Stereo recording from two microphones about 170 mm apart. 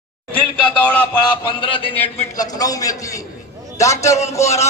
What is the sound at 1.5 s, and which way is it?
Speech, 30° left (ahead or behind).